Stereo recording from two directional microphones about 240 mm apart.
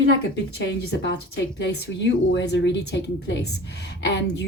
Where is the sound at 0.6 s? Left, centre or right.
Left.